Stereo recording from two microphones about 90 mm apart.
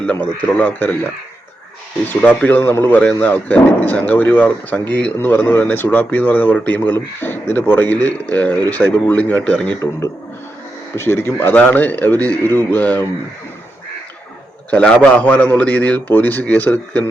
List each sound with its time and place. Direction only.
0.0 s a man's voice: 15° left (ahead or behind)
2.2 s speech: 20° left (ahead or behind)
10.9 s speech: 30° left (ahead or behind)
14.7 s a man's voice: 15° left (ahead or behind)